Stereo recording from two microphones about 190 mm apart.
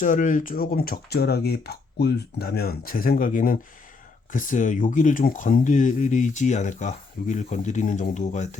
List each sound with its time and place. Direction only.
0.0 s speech: 45° left (ahead or behind)